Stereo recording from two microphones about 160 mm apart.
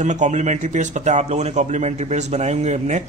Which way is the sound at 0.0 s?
50° right (ahead or behind).